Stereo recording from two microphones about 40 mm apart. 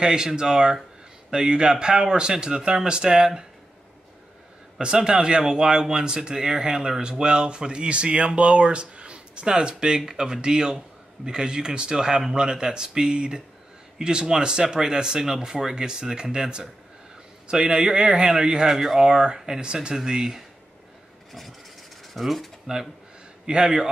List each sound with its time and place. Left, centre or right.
0.0 s speech: centre
4.7 s speech: centre
18.7 s speech: centre
18.9 s speech: centre
21.3 s vehicle: centre
22.0 s speech: centre
23.4 s speech: centre